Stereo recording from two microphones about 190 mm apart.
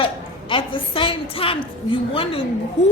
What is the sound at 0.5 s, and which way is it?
A woman's voice, 30° left (ahead or behind).